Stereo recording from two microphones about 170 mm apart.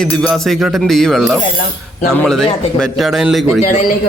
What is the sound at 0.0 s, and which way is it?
Speech, 5° left (ahead or behind).